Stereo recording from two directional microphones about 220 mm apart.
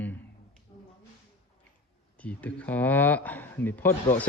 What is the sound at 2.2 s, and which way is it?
A man's voice, 5° left (ahead or behind).